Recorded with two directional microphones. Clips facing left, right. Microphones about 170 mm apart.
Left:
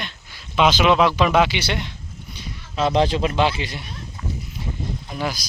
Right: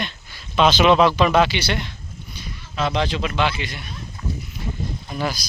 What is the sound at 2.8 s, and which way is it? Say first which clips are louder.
Speech: left 4 dB; 35° left (ahead or behind).